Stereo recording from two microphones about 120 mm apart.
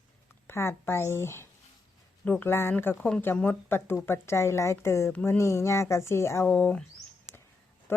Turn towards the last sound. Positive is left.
turn(degrees=15)  # may be behind; listen again after turning